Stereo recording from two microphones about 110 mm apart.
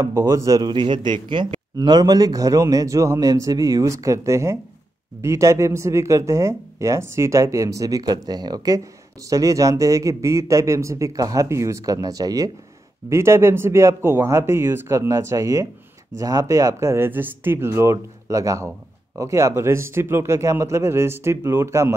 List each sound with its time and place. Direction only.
0.0 s speech: 25° right (ahead or behind)